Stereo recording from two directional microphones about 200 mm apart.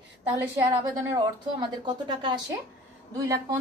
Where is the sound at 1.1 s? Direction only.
20° right (ahead or behind).